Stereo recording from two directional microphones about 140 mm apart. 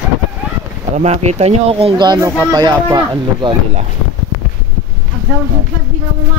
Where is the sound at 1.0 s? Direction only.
50° right (ahead or behind).